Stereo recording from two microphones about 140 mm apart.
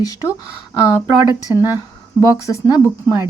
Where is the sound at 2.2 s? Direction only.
25° left (ahead or behind).